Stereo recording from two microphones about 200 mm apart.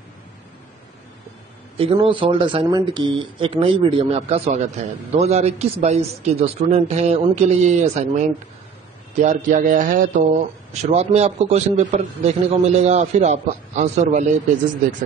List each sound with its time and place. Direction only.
1.8 s speech: 25° right (ahead or behind)